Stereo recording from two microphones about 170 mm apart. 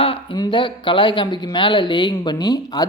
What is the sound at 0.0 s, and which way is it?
Speech, 30° left (ahead or behind).